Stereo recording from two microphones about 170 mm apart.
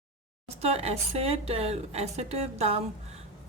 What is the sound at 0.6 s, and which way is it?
Speech, 40° right (ahead or behind).